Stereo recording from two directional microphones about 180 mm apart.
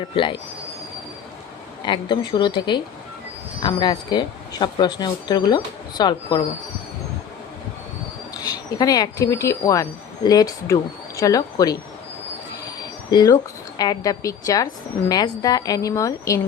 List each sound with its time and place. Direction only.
1.8 s speech: 25° left (ahead or behind)
8.8 s speech: 20° left (ahead or behind)
13.1 s speech: 20° left (ahead or behind)